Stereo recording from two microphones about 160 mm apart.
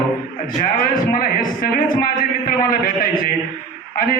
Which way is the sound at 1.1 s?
65° left (ahead or behind).